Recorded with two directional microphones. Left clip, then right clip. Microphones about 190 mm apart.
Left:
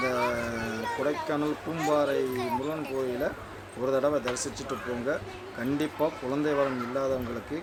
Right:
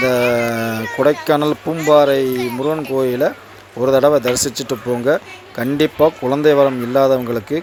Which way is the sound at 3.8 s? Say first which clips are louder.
Right 14 dB; 40° right (ahead or behind).